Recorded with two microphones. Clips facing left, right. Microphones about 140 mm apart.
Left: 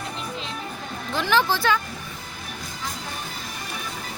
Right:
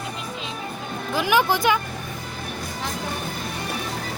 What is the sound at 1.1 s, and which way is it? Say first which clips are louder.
Speech: right 2 dB; 10° right (ahead or behind).